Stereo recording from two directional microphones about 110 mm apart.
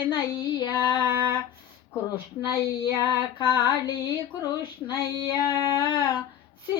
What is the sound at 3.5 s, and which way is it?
Speech, 40° left (ahead or behind).